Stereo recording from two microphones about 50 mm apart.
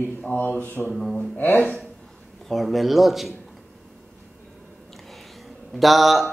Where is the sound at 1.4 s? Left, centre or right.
Left.